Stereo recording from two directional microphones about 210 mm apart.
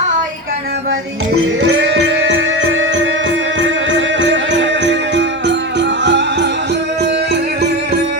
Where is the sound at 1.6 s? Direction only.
65° right (ahead or behind).